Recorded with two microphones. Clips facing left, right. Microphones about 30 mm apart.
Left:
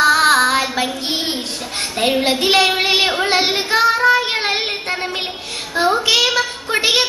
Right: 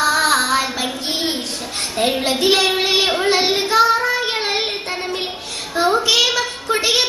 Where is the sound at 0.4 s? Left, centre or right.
Left.